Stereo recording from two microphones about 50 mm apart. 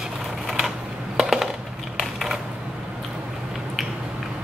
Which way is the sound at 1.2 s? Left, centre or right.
Centre.